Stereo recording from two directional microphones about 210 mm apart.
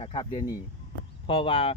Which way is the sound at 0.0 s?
25° left (ahead or behind).